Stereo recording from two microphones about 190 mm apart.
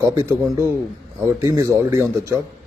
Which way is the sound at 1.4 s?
15° right (ahead or behind).